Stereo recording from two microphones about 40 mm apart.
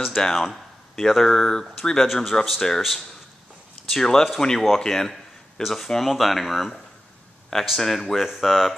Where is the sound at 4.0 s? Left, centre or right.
Centre.